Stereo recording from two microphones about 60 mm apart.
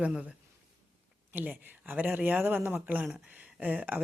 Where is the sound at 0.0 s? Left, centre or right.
Centre.